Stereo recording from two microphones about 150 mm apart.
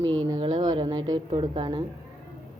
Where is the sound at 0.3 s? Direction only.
25° right (ahead or behind).